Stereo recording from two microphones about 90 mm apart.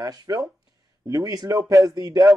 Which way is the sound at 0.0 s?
40° right (ahead or behind).